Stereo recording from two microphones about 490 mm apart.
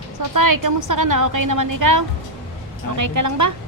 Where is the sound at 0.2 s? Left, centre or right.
Right.